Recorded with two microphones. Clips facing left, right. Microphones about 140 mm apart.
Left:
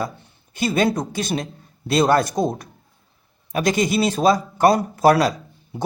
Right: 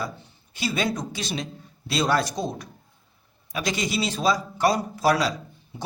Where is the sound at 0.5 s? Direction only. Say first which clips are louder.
Left 7 dB; 50° left (ahead or behind).